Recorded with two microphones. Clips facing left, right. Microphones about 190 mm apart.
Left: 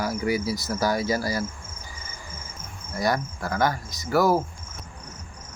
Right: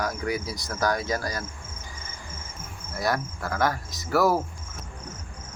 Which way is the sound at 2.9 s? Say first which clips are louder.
Left 2 dB; centre (ahead or behind).